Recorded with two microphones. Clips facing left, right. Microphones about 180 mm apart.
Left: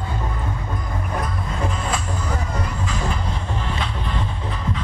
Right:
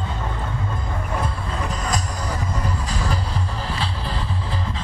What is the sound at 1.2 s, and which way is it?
Music, 40° right (ahead or behind).